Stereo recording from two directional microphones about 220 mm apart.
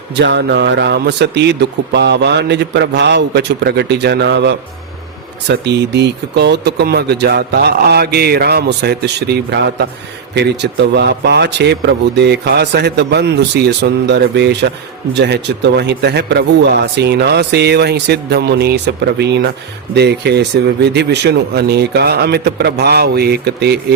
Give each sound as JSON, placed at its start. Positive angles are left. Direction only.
{"t": 0.1, "sound": "speech", "side_deg": -50}